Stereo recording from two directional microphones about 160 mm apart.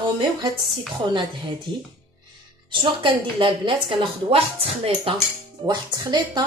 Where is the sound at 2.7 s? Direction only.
30° right (ahead or behind).